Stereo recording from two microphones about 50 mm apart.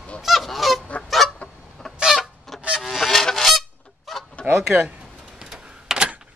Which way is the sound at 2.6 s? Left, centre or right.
Right.